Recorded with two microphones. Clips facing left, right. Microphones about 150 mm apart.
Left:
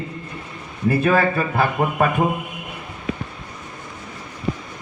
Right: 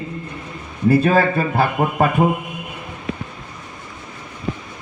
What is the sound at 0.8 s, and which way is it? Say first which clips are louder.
A man's voice: right 3 dB; 35° right (ahead or behind).